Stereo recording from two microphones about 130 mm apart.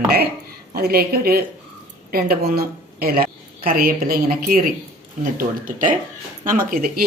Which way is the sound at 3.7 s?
90° right.